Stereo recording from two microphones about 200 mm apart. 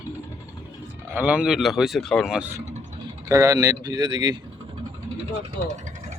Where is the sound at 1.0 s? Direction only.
10° right (ahead or behind).